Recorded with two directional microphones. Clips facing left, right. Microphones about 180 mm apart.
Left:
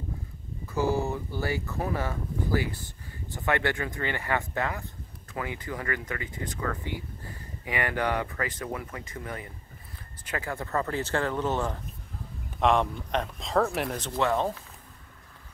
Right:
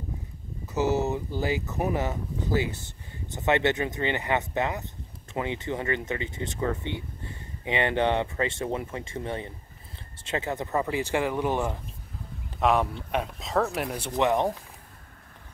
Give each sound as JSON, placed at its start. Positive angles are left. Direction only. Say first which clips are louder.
{"t": 0.7, "sound": "speech", "louder": "right 2 dB", "side_deg": -20}
{"t": 12.5, "sound": "speech", "louder": "even", "side_deg": -5}